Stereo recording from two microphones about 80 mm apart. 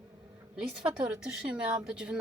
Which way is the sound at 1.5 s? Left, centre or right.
Centre.